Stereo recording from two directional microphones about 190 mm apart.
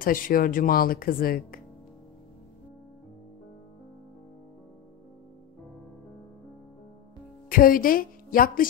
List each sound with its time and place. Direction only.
0.0 s speech: 45° left (ahead or behind)
7.4 s speech: 50° left (ahead or behind)